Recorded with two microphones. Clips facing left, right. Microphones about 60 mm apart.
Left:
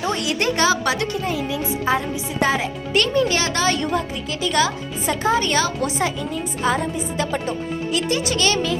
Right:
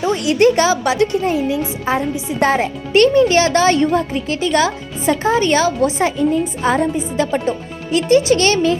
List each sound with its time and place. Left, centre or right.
0.3 s speech: right
2.4 s speech: right